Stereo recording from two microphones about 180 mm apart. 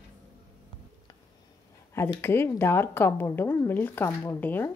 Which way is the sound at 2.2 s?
15° left (ahead or behind).